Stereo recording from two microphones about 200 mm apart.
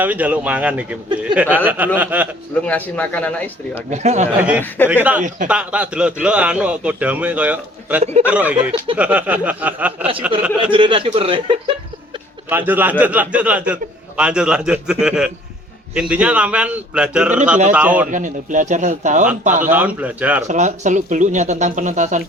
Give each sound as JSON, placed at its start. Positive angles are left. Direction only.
{"t": 0.0, "sound": "speech", "side_deg": -5}
{"t": 2.6, "sound": "speech", "side_deg": 5}
{"t": 3.8, "sound": "speech", "side_deg": -35}
{"t": 4.8, "sound": "speech", "side_deg": 10}
{"t": 5.5, "sound": "a man's voice", "side_deg": -5}
{"t": 10.6, "sound": "a man's voice", "side_deg": -25}
{"t": 12.5, "sound": "a man's voice", "side_deg": -10}
{"t": 18.1, "sound": "speech", "side_deg": -40}
{"t": 19.7, "sound": "speech", "side_deg": -5}
{"t": 20.5, "sound": "speech", "side_deg": -35}